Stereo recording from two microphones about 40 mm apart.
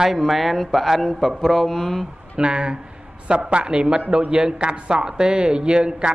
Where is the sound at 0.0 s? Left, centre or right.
Centre.